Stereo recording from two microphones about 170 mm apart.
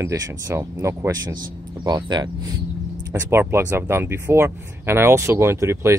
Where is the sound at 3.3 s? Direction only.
15° right (ahead or behind).